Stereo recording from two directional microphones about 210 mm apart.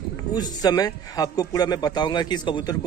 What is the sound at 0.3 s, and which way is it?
A man's voice, 20° left (ahead or behind).